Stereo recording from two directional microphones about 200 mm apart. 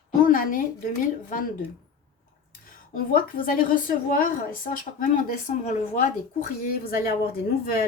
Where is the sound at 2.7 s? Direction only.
45° left (ahead or behind).